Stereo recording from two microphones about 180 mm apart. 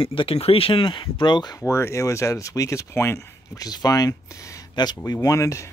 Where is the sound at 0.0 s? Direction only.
30° left (ahead or behind).